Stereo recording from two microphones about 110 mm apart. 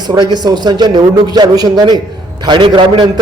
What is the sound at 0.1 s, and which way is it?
A man's voice, 40° right (ahead or behind).